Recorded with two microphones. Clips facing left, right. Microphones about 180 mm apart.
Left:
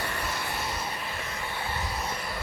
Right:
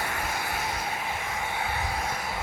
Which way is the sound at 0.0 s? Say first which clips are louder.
Right 1 dB; 50° right (ahead or behind).